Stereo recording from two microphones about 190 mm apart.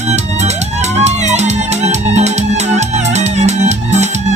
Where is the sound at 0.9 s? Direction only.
35° right (ahead or behind).